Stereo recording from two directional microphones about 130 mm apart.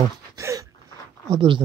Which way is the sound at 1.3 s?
40° right (ahead or behind).